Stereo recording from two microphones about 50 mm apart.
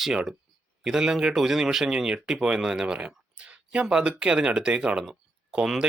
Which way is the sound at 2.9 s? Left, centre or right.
Right.